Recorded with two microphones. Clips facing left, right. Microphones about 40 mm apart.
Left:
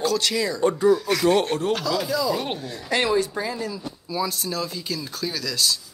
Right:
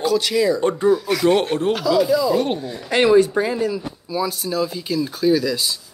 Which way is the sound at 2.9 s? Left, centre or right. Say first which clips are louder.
Right 8 dB; right.